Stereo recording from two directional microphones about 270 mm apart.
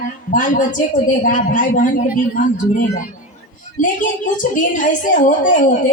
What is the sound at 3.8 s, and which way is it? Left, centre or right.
A woman's voice, left.